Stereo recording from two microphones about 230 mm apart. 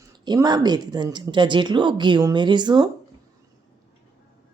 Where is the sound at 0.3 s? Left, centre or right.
Centre.